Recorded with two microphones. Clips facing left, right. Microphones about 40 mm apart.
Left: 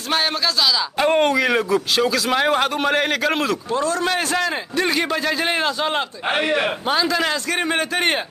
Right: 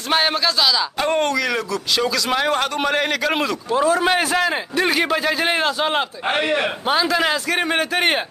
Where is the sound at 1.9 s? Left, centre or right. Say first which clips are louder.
Right 2 dB; centre.